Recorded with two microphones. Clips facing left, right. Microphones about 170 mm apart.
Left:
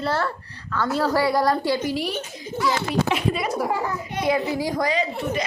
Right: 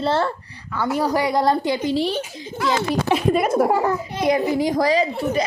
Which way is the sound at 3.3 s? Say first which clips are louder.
Right 7 dB; 50° right (ahead or behind).